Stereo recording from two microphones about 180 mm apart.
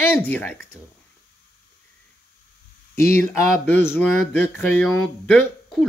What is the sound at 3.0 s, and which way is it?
Speech, 10° left (ahead or behind).